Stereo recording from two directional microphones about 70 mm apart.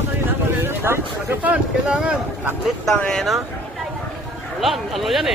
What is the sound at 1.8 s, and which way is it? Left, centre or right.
Speech, centre.